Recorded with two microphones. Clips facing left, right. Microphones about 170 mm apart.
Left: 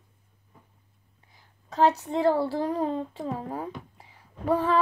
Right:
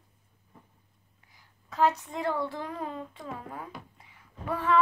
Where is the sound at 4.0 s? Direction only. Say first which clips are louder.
Left 10 dB; 30° left (ahead or behind).